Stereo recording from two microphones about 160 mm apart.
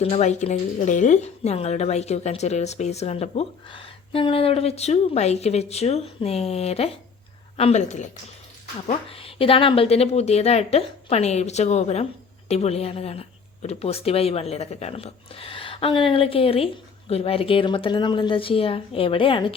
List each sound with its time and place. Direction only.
0.0 s a woman's voice: 45° left (ahead or behind)
8.9 s a woman's voice: 35° left (ahead or behind)